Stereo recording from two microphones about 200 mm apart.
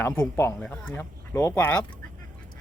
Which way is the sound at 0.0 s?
10° left (ahead or behind).